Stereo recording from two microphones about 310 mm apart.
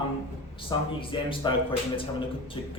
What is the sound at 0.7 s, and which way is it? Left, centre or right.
Speech, centre.